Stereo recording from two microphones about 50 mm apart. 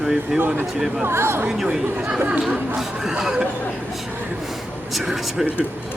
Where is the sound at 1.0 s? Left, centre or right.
Right.